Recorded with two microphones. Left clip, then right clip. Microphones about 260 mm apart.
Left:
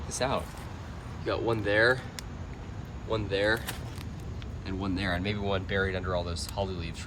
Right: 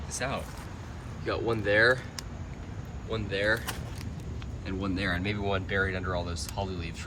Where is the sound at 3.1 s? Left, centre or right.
Centre.